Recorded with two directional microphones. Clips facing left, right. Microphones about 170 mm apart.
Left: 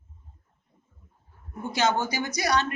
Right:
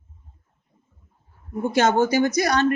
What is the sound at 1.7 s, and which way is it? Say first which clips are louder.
Speech: right 7 dB; 50° right (ahead or behind).